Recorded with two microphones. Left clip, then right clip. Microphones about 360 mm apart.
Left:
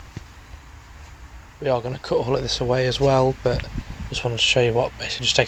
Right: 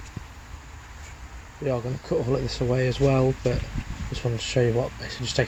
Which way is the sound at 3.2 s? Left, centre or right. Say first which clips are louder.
Left 4 dB; left.